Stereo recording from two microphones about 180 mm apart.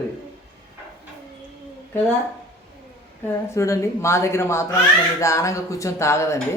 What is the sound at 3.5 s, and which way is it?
Speech, 15° left (ahead or behind).